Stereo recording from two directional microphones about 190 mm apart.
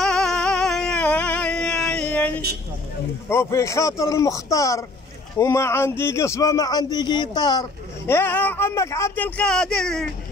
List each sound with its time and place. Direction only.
0.0 s a sound: 5° left (ahead or behind)
3.3 s speech: 15° left (ahead or behind)
8.1 s speech: 10° left (ahead or behind)